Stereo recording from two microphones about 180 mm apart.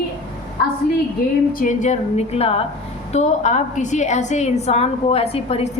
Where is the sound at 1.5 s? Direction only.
45° left (ahead or behind).